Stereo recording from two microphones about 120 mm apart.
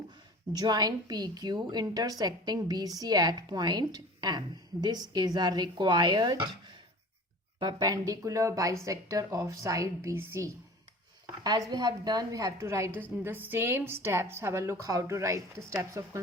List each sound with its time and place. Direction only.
0.5 s a woman's voice: 35° right (ahead or behind)
11.4 s a woman's voice: 35° right (ahead or behind)